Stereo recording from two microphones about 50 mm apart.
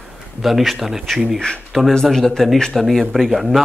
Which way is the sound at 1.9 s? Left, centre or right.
Centre.